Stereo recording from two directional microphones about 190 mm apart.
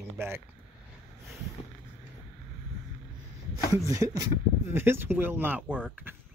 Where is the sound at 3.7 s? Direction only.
15° right (ahead or behind).